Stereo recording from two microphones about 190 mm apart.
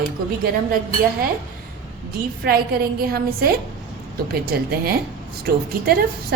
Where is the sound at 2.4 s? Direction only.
55° right (ahead or behind).